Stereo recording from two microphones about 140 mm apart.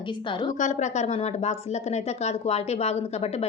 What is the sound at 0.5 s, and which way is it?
Speech, 60° left (ahead or behind).